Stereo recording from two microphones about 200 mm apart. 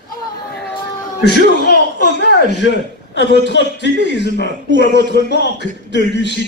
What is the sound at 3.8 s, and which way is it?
Speech, 60° right (ahead or behind).